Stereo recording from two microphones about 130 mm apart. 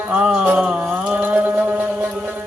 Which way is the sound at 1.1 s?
10° right (ahead or behind).